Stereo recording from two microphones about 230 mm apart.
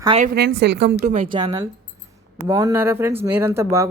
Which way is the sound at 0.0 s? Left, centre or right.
Right.